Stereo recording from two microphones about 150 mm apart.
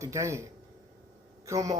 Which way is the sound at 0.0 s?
20° right (ahead or behind).